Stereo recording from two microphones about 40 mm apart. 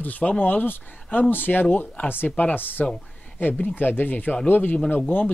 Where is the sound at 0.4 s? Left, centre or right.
Left.